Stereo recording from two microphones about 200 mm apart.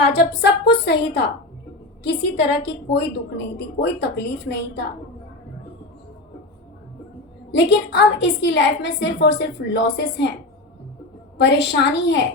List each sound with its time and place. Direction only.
0.2 s a woman's voice: 55° left (ahead or behind)
7.5 s a woman's voice: 60° left (ahead or behind)
11.3 s a woman's voice: 60° left (ahead or behind)